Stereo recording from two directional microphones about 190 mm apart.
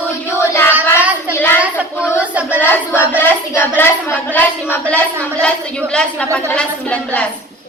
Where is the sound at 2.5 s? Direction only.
10° left (ahead or behind).